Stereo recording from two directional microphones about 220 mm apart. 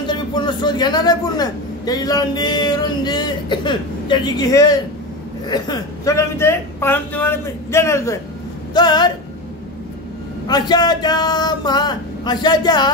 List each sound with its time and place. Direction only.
0.0 s speech: 20° left (ahead or behind)
10.4 s speech: 20° left (ahead or behind)